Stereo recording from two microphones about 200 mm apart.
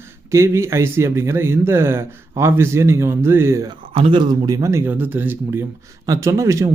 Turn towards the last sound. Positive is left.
turn(degrees=-15)  # may be behind; listen again after turning